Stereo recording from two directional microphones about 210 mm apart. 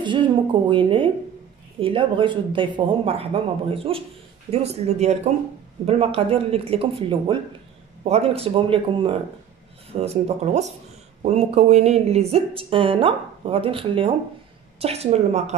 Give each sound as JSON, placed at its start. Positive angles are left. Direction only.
{"t": 0.0, "sound": "speech", "side_deg": -20}